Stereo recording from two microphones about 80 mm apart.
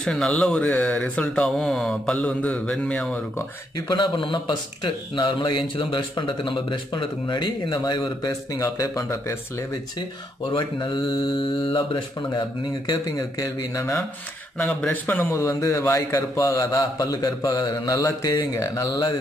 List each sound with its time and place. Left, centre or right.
0.0 s speech: centre
3.9 s speech: left
8.3 s a man's voice: left
10.5 s speech: left
13.4 s a man's voice: left
14.6 s speech: centre
15.0 s speech: left
15.3 s a man's voice: left
18.8 s speech: left